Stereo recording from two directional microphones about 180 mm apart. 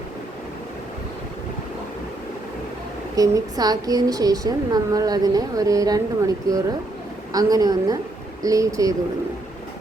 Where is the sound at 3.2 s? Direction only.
20° right (ahead or behind).